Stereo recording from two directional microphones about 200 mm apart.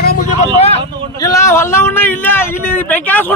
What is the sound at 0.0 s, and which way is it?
Vehicle, 45° left (ahead or behind).